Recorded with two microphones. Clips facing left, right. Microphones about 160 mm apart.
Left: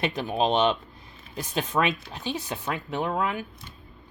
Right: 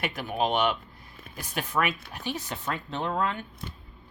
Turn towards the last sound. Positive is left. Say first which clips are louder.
# left 2 dB
turn(degrees=10)  # may be behind; listen again after turning